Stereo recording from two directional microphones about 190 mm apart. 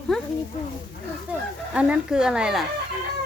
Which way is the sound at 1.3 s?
5° right (ahead or behind).